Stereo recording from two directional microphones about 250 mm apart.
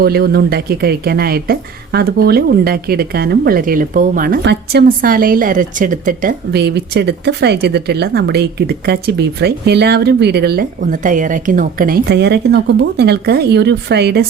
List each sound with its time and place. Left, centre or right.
0.0 s speech: right